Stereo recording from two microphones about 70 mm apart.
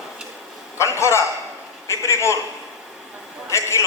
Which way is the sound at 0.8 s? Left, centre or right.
Left.